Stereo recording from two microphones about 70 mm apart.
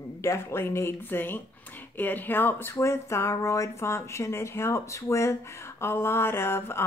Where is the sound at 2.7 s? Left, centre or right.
Left.